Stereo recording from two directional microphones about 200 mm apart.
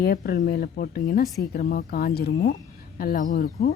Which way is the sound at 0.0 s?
50° left (ahead or behind).